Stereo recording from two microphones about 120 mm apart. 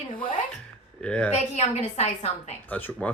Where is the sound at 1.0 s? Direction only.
10° left (ahead or behind).